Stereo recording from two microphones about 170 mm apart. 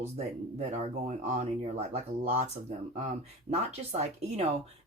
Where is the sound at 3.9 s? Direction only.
40° right (ahead or behind).